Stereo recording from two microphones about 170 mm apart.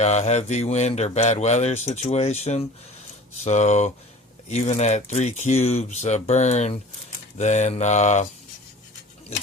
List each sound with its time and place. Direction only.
0.0 s speech: 40° left (ahead or behind)
3.3 s mantra: 45° left (ahead or behind)
4.4 s speech: 40° left (ahead or behind)
7.3 s mantra: 45° left (ahead or behind)